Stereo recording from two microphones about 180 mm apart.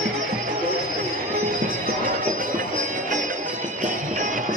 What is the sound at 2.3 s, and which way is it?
Music, 45° right (ahead or behind).